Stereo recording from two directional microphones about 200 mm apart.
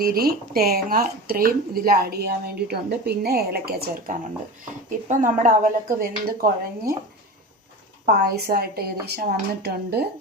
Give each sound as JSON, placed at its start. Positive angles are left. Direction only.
{"t": 0.0, "sound": "a woman's voice", "side_deg": -50}
{"t": 8.0, "sound": "speech", "side_deg": -50}